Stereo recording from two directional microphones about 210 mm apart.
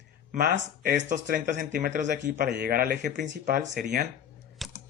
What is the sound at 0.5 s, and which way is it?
Speech, 55° right (ahead or behind).